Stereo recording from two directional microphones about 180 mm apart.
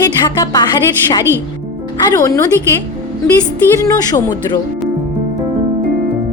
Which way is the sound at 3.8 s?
20° left (ahead or behind).